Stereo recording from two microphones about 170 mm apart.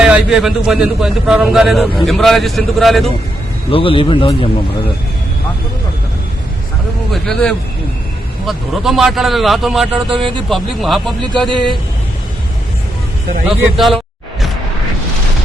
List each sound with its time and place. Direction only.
0.0 s speech: 5° right (ahead or behind)
3.7 s speech: 30° left (ahead or behind)
7.1 s speech: 5° left (ahead or behind)
11.3 s speech: 30° right (ahead or behind)
13.7 s speech: centre (ahead or behind)